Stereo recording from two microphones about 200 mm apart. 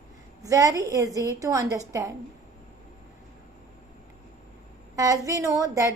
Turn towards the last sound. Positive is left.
turn(degrees=-15)  # may be behind; listen again after turning